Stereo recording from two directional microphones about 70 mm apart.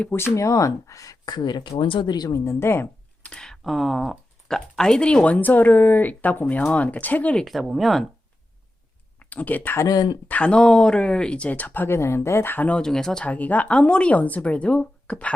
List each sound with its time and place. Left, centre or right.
0.3 s speech: left
2.3 s a woman's voice: left
3.2 s speech: centre
7.4 s speech: centre
9.1 s speech: left
9.8 s speech: left
10.2 s speech: centre
12.6 s speech: centre
13.2 s speech: left